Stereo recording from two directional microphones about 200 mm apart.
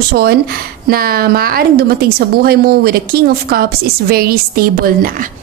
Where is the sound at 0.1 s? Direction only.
55° right (ahead or behind).